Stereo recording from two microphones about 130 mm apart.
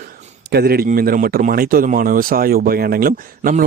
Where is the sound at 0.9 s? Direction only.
80° right.